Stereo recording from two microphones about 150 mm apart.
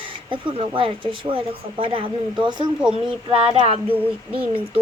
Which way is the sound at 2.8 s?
5° right (ahead or behind).